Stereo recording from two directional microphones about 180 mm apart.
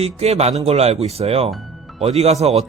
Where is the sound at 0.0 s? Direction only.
35° right (ahead or behind).